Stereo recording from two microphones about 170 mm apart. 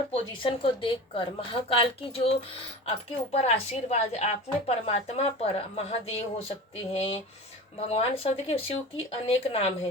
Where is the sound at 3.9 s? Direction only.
40° left (ahead or behind).